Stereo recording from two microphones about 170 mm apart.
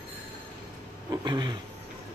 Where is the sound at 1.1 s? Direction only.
25° right (ahead or behind).